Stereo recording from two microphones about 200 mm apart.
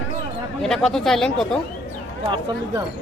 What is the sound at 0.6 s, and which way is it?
Speech, centre (ahead or behind).